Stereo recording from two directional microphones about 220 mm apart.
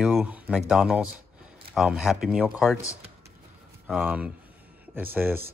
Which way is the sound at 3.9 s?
5° right (ahead or behind).